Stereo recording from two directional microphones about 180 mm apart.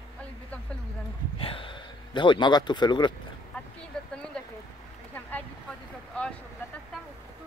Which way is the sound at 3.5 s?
5° left (ahead or behind).